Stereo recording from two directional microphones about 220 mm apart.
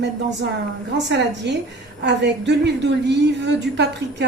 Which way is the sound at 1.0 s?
50° right (ahead or behind).